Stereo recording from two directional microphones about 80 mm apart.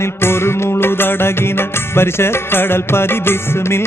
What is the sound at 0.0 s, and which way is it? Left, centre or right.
Music, left.